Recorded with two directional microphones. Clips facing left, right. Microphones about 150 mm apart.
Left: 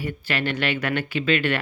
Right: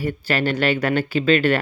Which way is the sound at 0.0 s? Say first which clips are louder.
Right 5 dB; 40° right (ahead or behind).